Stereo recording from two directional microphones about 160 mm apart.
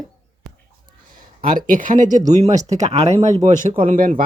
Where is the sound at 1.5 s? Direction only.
55° right (ahead or behind).